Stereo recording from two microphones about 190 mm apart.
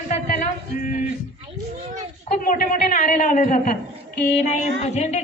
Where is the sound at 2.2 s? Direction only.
45° left (ahead or behind).